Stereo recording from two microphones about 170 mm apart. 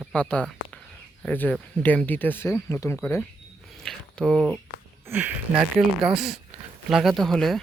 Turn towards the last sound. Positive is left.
turn(degrees=0)  # may be behind; listen again after turning